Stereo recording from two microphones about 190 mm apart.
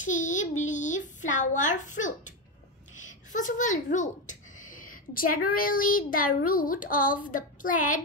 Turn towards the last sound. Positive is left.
turn(degrees=45)  # may be behind; listen again after turning